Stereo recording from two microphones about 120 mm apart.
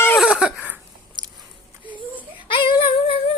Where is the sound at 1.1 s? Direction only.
45° right (ahead or behind).